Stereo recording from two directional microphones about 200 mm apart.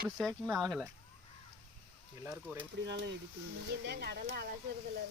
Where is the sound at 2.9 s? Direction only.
60° right (ahead or behind).